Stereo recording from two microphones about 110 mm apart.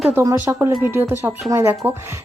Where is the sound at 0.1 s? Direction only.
25° right (ahead or behind).